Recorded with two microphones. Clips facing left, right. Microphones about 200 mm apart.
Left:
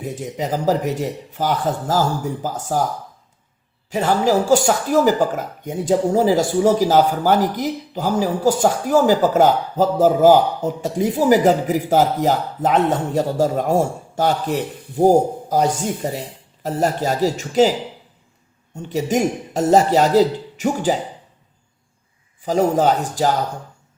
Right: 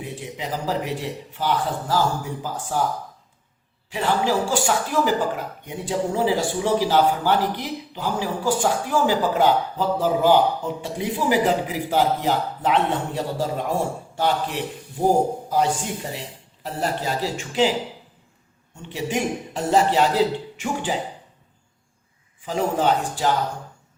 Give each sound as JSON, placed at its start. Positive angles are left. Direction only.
{"t": 0.0, "sound": "speech", "side_deg": 45}
{"t": 3.8, "sound": "speech", "side_deg": 40}
{"t": 22.4, "sound": "speech", "side_deg": 40}